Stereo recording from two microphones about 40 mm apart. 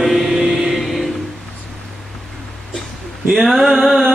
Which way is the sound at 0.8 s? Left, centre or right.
Centre.